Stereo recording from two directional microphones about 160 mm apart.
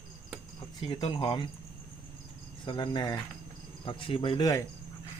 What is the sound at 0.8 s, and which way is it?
Speech, 35° left (ahead or behind).